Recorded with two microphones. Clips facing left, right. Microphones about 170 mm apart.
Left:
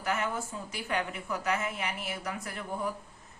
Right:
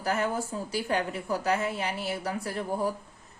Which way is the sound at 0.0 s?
35° right (ahead or behind).